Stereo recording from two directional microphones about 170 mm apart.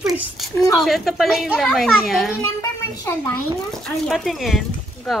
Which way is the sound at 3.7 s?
Centre (ahead or behind).